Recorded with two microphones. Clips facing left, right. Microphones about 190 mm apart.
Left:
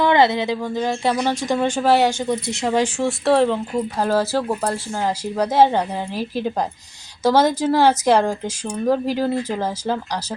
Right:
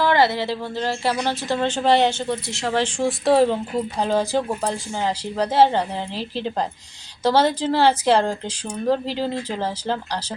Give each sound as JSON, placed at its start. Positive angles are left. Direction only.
{"t": 0.0, "sound": "speech", "side_deg": 20}
{"t": 3.0, "sound": "a woman's voice", "side_deg": 0}